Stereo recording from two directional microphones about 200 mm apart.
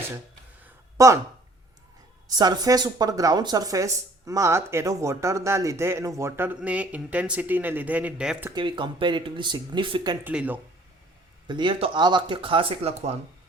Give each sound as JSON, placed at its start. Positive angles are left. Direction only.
{"t": 0.6, "sound": "a sound", "side_deg": -15}
{"t": 2.2, "sound": "speech", "side_deg": -20}
{"t": 8.5, "sound": "speech", "side_deg": -25}
{"t": 10.2, "sound": "speech", "side_deg": -10}
{"t": 11.4, "sound": "speech", "side_deg": -25}